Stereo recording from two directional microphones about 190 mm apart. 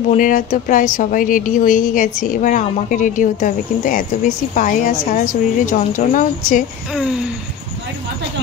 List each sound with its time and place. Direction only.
0.1 s a woman's voice: 45° left (ahead or behind)
6.9 s speech: 5° right (ahead or behind)